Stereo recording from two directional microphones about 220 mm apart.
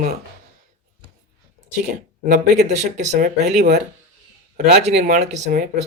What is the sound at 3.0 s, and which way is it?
Speech, 30° right (ahead or behind).